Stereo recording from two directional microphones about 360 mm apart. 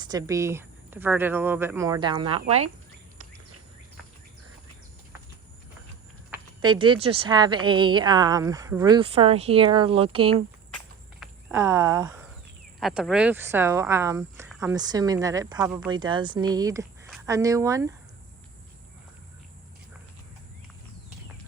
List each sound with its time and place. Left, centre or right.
0.0 s speech: centre
6.6 s speech: centre